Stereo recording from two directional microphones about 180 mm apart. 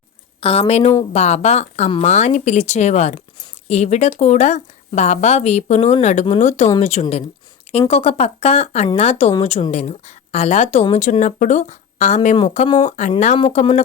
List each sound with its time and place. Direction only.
0.3 s a woman's voice: 30° left (ahead or behind)